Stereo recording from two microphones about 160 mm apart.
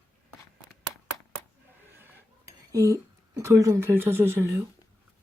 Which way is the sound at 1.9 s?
15° right (ahead or behind).